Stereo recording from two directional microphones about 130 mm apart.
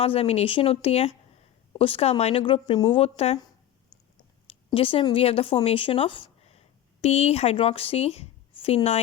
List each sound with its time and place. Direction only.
0.0 s speech: 50° left (ahead or behind)
2.4 s speech: 40° left (ahead or behind)
4.4 s a sound: 45° left (ahead or behind)
5.1 s speech: 50° left (ahead or behind)